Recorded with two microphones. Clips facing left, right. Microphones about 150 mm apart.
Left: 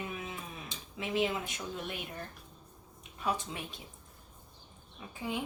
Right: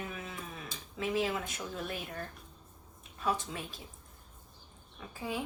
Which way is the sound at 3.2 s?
20° left (ahead or behind).